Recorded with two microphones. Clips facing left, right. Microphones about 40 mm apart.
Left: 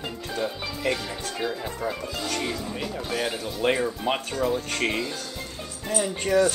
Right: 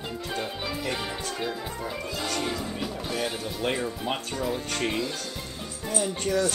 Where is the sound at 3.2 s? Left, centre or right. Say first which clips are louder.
Left 6 dB; centre.